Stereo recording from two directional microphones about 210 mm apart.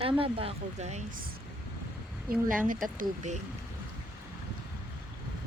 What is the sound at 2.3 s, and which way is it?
Speech, 40° right (ahead or behind).